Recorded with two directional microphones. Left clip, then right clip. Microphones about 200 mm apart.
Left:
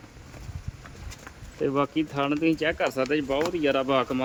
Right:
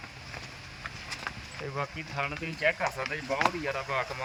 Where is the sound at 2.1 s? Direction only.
60° left (ahead or behind).